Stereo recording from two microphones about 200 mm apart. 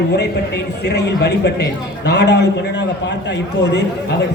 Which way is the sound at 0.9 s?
55° left (ahead or behind).